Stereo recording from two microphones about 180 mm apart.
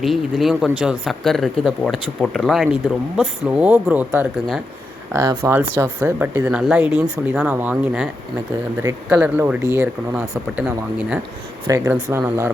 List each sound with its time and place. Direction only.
0.0 s speech: centre (ahead or behind)
5.1 s speech: 15° right (ahead or behind)
6.5 s speech: centre (ahead or behind)
11.6 s speech: 20° right (ahead or behind)